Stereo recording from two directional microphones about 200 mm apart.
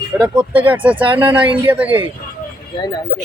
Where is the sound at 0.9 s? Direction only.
25° right (ahead or behind).